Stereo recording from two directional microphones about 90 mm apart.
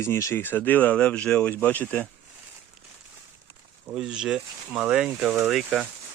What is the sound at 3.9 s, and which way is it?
Speech, 10° right (ahead or behind).